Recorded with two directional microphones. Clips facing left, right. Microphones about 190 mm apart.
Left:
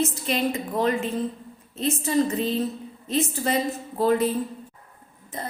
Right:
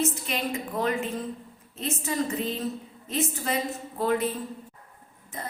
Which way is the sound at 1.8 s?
35° left (ahead or behind).